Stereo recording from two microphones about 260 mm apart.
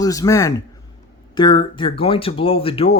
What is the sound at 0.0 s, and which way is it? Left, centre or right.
Speech, centre.